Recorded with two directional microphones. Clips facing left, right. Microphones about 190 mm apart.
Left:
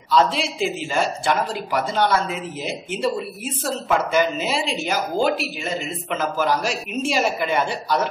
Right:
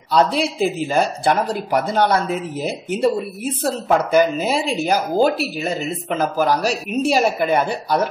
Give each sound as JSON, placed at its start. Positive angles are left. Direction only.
{"t": 0.1, "sound": "speech", "side_deg": -40}